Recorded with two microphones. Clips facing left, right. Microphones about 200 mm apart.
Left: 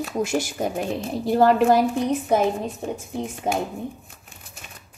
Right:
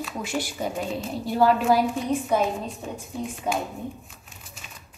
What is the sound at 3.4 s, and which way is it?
Speech, 25° left (ahead or behind).